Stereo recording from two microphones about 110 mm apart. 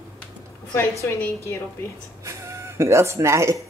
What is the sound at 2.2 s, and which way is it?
Speech, 25° right (ahead or behind).